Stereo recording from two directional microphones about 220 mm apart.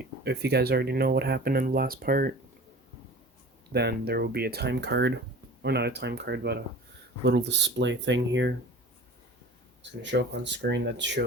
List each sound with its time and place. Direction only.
0.3 s speech: 50° right (ahead or behind)
3.7 s speech: 50° right (ahead or behind)
10.0 s speech: 55° right (ahead or behind)